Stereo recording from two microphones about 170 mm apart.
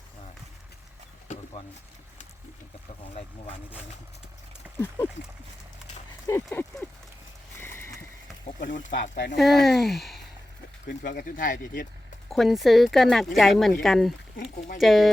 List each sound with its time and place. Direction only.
1.3 s a sound: 45° left (ahead or behind)
6.2 s speech: 15° left (ahead or behind)
7.6 s rowboat: 15° left (ahead or behind)
8.5 s speech: 50° left (ahead or behind)
8.9 s speech: 85° left
9.4 s speech: centre (ahead or behind)
10.8 s speech: 55° left (ahead or behind)
12.3 s speech: centre (ahead or behind)